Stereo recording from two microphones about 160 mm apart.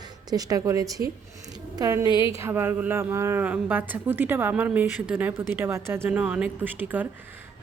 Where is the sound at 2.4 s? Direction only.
15° right (ahead or behind).